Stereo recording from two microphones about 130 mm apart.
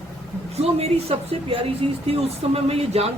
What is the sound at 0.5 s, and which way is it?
Speech, 50° right (ahead or behind).